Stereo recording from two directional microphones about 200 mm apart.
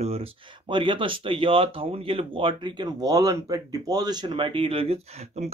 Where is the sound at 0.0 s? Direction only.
30° right (ahead or behind).